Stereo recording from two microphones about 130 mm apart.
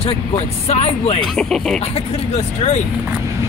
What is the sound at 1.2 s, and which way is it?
Speech, 5° left (ahead or behind).